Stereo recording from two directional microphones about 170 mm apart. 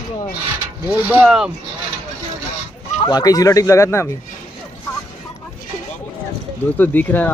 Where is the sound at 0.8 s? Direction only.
10° right (ahead or behind).